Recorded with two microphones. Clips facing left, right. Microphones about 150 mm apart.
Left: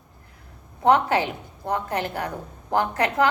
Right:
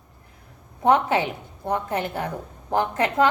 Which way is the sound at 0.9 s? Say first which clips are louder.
Even; 20° right (ahead or behind).